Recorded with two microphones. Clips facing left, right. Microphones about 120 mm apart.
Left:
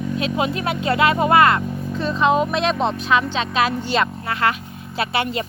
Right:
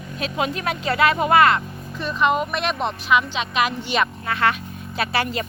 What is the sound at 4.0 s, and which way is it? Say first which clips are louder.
Speech: right 2 dB; 25° left (ahead or behind).